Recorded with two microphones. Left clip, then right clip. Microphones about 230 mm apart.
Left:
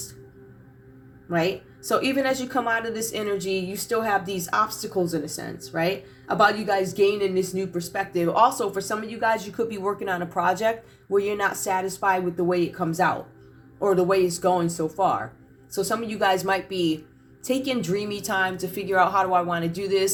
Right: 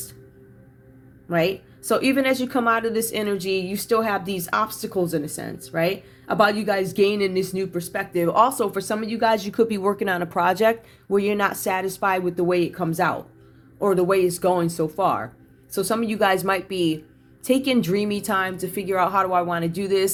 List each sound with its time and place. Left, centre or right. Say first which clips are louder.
1.3 s a woman's voice: right 3 dB; right